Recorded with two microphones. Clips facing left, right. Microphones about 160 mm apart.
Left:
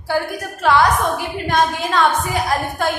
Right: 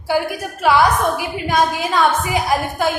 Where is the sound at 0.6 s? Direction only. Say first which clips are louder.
Right 1 dB; 5° right (ahead or behind).